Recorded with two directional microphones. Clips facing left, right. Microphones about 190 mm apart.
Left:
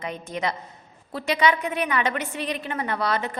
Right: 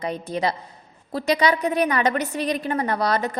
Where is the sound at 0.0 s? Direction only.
35° right (ahead or behind).